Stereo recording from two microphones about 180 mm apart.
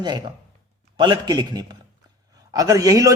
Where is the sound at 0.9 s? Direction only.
25° right (ahead or behind).